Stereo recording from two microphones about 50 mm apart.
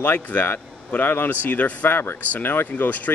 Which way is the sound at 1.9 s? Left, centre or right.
Left.